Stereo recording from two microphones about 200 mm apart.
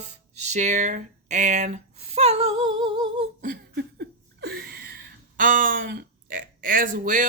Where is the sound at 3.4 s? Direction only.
50° right (ahead or behind).